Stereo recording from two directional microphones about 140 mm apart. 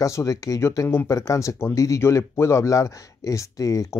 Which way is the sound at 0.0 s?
20° left (ahead or behind).